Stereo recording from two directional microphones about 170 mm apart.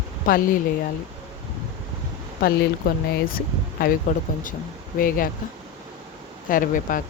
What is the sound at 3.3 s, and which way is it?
Speech, 60° left (ahead or behind).